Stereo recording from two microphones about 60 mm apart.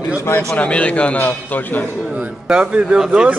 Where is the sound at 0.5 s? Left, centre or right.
Left.